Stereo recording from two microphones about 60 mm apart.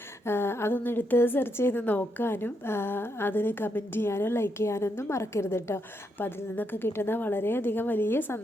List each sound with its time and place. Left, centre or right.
0.3 s a sound: left
0.8 s a woman's voice: left
1.8 s a woman's voice: left
2.2 s a woman's voice: left